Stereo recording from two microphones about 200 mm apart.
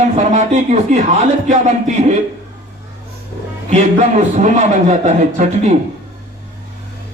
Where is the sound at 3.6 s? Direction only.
35° right (ahead or behind).